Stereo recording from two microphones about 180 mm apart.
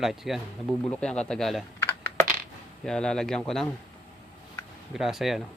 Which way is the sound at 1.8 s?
15° left (ahead or behind).